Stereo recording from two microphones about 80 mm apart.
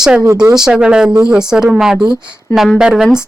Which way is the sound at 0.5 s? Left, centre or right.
Centre.